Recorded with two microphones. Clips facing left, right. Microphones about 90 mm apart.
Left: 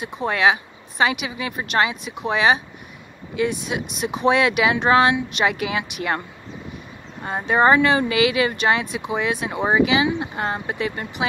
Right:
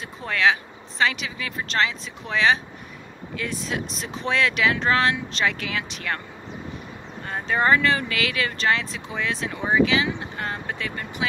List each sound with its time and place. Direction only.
0.2 s speech: 20° left (ahead or behind)
7.2 s speech: 20° left (ahead or behind)